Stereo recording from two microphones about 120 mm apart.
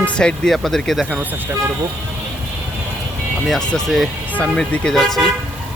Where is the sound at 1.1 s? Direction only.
15° right (ahead or behind).